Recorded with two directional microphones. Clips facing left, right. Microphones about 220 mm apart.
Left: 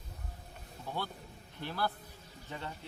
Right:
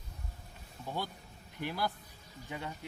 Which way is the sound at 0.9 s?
15° right (ahead or behind).